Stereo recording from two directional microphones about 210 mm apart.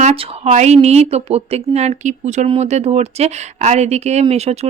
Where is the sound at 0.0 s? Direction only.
30° right (ahead or behind).